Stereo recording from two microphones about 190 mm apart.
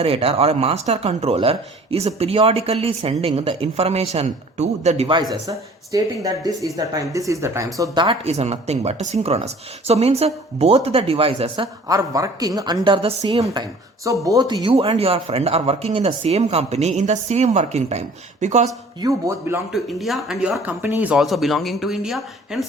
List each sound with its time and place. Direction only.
0.0 s speech: 30° right (ahead or behind)
5.3 s speech: 20° right (ahead or behind)
13.4 s speech: 20° right (ahead or behind); by 18.7 s 35° right (ahead or behind)
19.0 s speech: 15° right (ahead or behind)
19.7 s speech: centre (ahead or behind)